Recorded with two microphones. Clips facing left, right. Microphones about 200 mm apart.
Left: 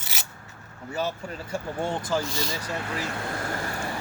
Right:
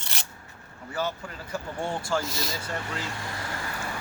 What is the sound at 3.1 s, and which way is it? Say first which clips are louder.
Vehicle: left 4 dB; 55° left (ahead or behind).